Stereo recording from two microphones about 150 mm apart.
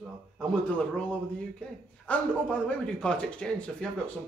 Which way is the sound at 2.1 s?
10° left (ahead or behind).